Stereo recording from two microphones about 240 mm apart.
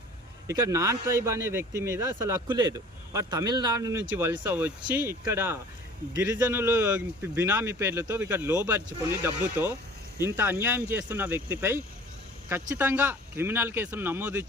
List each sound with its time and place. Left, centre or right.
0.4 s speech: centre